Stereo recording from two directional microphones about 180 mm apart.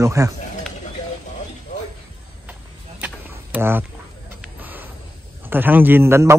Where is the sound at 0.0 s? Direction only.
15° right (ahead or behind).